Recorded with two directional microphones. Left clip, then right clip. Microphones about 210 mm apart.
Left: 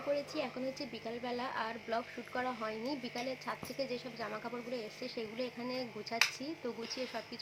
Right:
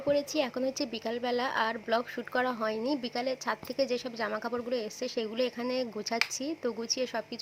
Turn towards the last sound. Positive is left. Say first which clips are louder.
# right 8 dB
turn(degrees=-40)  # may be behind; listen again after turning